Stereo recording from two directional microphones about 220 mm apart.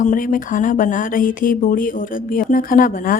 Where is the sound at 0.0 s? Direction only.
40° left (ahead or behind).